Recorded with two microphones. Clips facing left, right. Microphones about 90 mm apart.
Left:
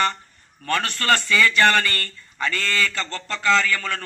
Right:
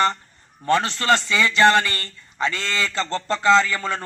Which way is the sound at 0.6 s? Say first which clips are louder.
Right 4 dB; 20° right (ahead or behind).